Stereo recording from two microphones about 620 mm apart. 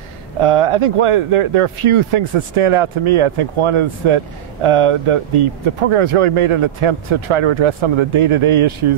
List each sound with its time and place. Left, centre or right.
0.4 s speech: right